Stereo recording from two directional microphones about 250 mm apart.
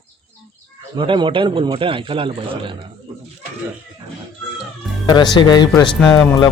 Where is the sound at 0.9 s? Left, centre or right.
Centre.